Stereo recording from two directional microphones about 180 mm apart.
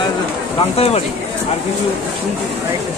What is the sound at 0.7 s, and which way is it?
Speech, 35° left (ahead or behind).